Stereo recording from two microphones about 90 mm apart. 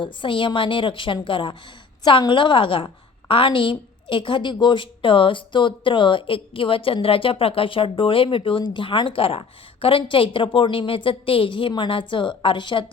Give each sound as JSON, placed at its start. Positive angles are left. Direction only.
{"t": 0.0, "sound": "a woman's voice", "side_deg": 65}